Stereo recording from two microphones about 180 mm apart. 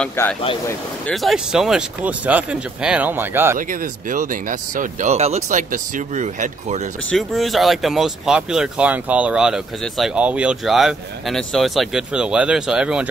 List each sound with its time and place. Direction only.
0.0 s speech: 10° left (ahead or behind)
1.1 s speech: centre (ahead or behind)
4.1 s speech: 45° right (ahead or behind)
7.1 s speech: centre (ahead or behind)